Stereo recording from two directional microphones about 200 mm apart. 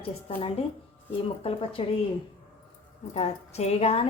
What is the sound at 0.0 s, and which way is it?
A woman's voice, 30° left (ahead or behind).